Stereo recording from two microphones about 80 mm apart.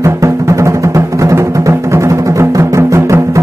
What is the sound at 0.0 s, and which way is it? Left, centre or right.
Music, right.